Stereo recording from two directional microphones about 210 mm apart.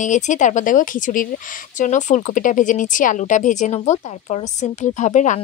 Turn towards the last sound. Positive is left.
turn(degrees=35)  # may be behind; listen again after turning